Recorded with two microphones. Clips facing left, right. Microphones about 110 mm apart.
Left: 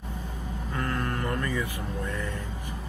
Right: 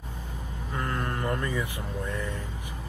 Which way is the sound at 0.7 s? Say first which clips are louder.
Left 1 dB; 20° right (ahead or behind).